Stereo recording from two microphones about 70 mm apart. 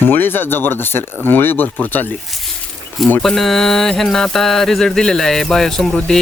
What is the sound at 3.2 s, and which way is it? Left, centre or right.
Mantra, centre.